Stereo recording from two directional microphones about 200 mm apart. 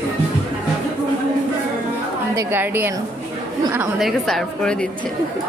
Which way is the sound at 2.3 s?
10° right (ahead or behind).